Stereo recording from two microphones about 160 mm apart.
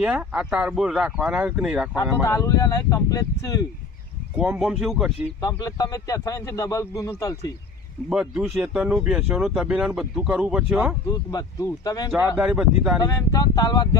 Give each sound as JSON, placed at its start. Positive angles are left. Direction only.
{"t": 0.0, "sound": "speech", "side_deg": -5}
{"t": 2.2, "sound": "speech", "side_deg": 20}
{"t": 4.4, "sound": "speech", "side_deg": -10}
{"t": 5.4, "sound": "speech", "side_deg": 25}
{"t": 8.1, "sound": "speech", "side_deg": -5}
{"t": 11.0, "sound": "speech", "side_deg": 25}
{"t": 12.4, "sound": "speech", "side_deg": -5}
{"t": 13.0, "sound": "speech", "side_deg": 20}